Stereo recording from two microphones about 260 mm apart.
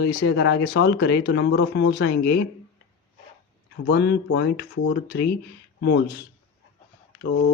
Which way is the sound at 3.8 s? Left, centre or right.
Left.